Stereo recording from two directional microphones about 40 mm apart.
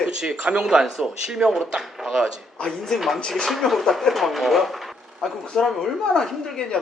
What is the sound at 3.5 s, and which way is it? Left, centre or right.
Speech, centre.